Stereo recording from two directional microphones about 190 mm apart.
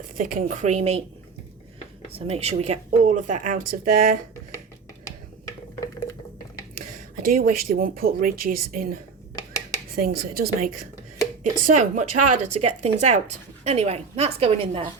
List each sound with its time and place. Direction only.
0.2 s a woman's voice: 45° right (ahead or behind)
2.1 s a woman's voice: 35° right (ahead or behind)
6.7 s speech: 45° right (ahead or behind)
9.3 s a sound: 15° left (ahead or behind)
9.9 s a woman's voice: 50° right (ahead or behind); by 14.8 s 30° right (ahead or behind)